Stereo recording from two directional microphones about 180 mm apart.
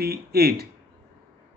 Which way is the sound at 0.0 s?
60° right (ahead or behind).